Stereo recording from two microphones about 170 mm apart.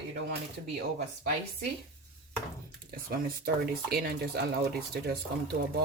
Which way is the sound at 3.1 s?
65° right (ahead or behind).